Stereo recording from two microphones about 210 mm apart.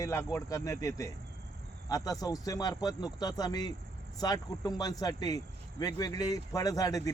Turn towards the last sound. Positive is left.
turn(degrees=15)  # may be behind; listen again after turning